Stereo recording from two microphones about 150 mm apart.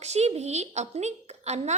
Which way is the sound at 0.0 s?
45° right (ahead or behind).